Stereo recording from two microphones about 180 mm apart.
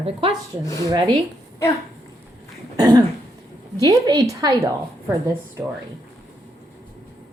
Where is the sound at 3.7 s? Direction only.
20° right (ahead or behind).